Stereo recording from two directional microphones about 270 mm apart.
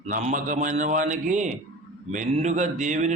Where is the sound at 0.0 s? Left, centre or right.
Right.